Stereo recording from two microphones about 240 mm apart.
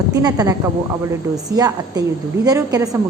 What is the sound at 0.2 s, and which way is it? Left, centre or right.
A woman's voice, centre.